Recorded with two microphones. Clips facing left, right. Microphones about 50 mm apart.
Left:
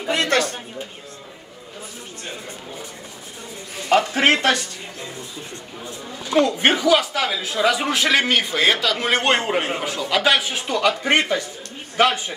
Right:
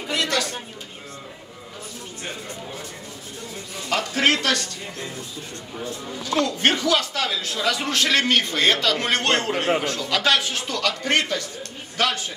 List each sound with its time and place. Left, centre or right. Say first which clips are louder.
0.1 s a sound: left 4 dB; left
3.9 s a man's voice: left 4 dB; left
5.9 s a man's voice: right 1 dB; centre